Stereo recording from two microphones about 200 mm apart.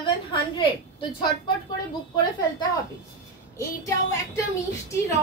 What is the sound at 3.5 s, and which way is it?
Speech, 15° left (ahead or behind).